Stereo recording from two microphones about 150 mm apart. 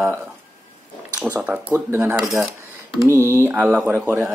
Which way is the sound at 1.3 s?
10° right (ahead or behind).